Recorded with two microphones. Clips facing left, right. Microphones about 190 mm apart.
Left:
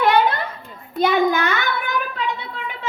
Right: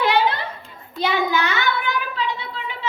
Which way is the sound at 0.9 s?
50° left (ahead or behind).